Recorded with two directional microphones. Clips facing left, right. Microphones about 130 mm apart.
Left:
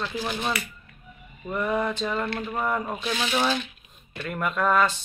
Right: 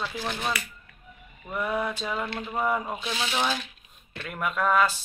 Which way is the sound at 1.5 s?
5° right (ahead or behind).